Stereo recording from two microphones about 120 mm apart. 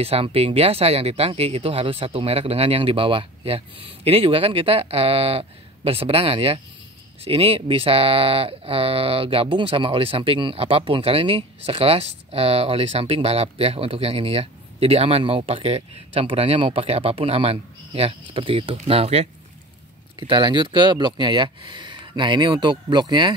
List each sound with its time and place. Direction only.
0.0 s speech: 55° right (ahead or behind)
20.2 s speech: 40° right (ahead or behind)